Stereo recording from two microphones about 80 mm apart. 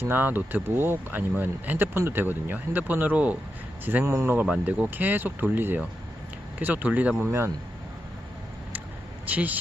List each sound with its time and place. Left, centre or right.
0.0 s speech: right
4.0 s speech: right
4.6 s speech: right
7.2 s speech: right
9.2 s speech: centre